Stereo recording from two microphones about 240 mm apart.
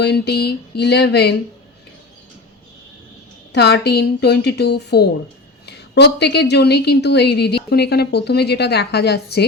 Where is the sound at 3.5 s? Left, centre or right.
Left.